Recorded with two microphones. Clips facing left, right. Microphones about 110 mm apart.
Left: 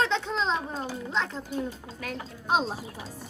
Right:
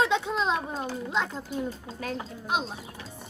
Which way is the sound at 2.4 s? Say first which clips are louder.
Left 4 dB; 35° left (ahead or behind).